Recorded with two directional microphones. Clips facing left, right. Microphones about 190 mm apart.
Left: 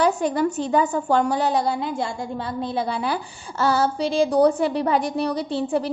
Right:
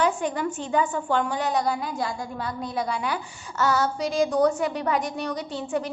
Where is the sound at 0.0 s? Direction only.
35° left (ahead or behind).